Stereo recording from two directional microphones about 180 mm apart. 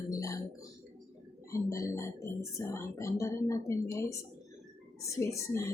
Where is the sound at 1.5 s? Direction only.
15° left (ahead or behind).